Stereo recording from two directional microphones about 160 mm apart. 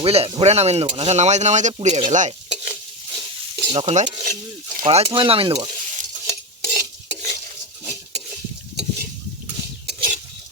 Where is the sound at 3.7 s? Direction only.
40° right (ahead or behind).